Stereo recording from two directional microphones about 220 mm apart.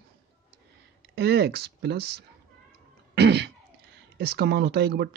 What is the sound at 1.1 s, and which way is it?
Speech, 50° right (ahead or behind).